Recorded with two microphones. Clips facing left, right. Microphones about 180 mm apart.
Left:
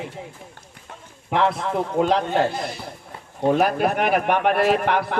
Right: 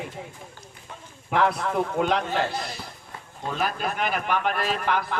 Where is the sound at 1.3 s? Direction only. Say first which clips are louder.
Left 2 dB; 25° left (ahead or behind).